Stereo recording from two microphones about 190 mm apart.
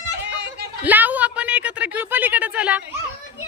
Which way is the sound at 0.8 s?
10° right (ahead or behind).